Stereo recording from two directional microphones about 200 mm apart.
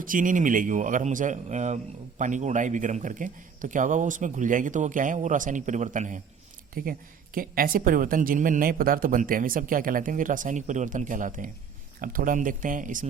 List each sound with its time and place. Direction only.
0.0 s a woman's voice: 40° right (ahead or behind)